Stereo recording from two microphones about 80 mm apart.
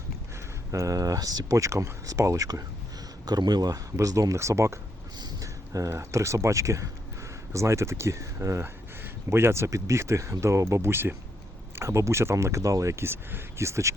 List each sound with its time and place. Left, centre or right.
0.3 s speech: right
3.2 s speech: right
3.9 s speech: right